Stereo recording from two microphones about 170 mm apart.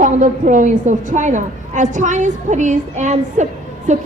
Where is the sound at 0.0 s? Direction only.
50° right (ahead or behind).